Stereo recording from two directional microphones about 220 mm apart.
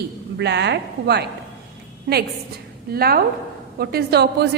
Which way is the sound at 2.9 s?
45° right (ahead or behind).